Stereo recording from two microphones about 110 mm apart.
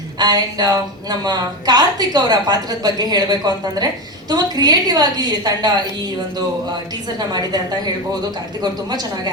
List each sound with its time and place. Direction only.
0.2 s a woman's voice: 40° right (ahead or behind)
8.9 s a woman's voice: 35° right (ahead or behind)